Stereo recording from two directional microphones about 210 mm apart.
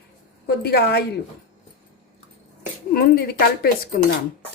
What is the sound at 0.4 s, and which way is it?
Speech, 50° left (ahead or behind).